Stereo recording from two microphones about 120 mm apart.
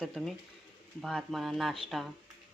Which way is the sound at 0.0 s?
Centre (ahead or behind).